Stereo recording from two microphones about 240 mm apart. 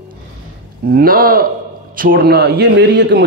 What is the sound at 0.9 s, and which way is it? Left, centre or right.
A man's voice, right.